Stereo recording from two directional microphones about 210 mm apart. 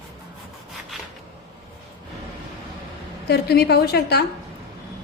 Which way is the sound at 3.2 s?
50° left (ahead or behind).